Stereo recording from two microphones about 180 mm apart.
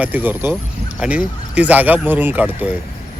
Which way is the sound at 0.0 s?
10° right (ahead or behind).